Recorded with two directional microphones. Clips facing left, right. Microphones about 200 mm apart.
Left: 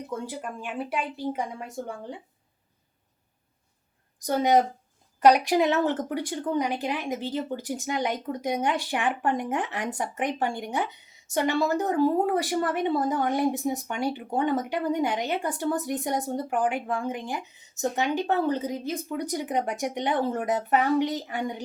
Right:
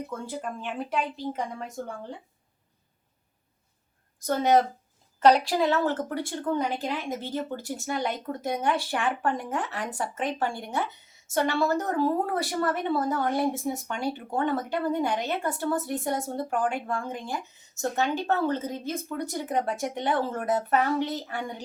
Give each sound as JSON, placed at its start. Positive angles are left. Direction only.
{"t": 0.1, "sound": "speech", "side_deg": 10}
{"t": 4.3, "sound": "speech", "side_deg": 15}